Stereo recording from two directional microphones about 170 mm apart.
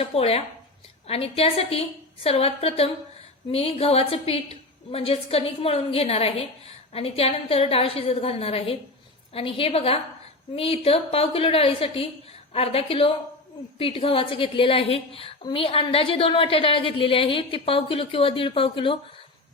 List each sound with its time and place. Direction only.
0.0 s a woman's voice: 35° left (ahead or behind)